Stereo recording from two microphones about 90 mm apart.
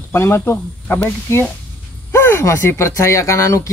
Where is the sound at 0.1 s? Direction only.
30° left (ahead or behind).